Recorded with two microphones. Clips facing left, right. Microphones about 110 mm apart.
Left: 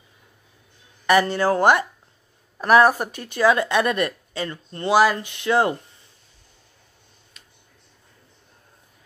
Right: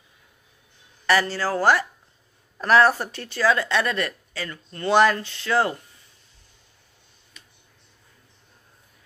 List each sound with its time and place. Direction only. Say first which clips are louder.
1.3 s speech: left 3 dB; 20° left (ahead or behind)
4.9 s speech: left 1 dB; 10° left (ahead or behind)